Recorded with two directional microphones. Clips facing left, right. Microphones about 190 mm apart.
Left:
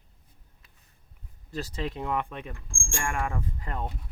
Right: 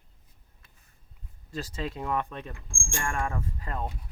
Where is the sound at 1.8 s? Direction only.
20° left (ahead or behind).